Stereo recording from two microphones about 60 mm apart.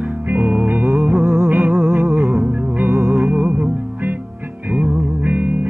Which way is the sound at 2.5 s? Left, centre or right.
Right.